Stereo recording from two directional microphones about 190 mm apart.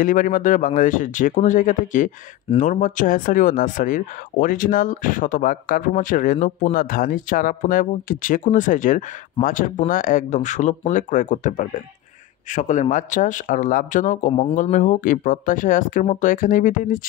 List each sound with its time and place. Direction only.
0.0 s a man's voice: 45° left (ahead or behind)